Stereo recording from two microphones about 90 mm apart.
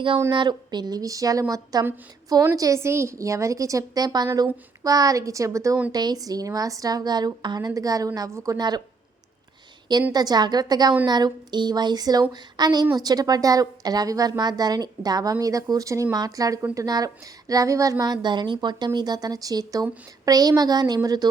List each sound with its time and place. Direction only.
0.3 s a woman's voice: 55° right (ahead or behind); by 5.7 s 35° right (ahead or behind)
5.9 s a woman's voice: 50° right (ahead or behind)
8.3 s a woman's voice: 30° right (ahead or behind)
8.5 s a woman's voice: 50° right (ahead or behind)
10.1 s a woman's voice: 50° right (ahead or behind)
18.0 s a woman's voice: 50° right (ahead or behind)